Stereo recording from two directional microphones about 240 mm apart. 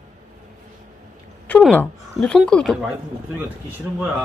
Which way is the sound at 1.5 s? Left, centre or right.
Centre.